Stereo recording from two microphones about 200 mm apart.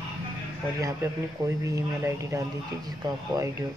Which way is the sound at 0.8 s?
15° right (ahead or behind).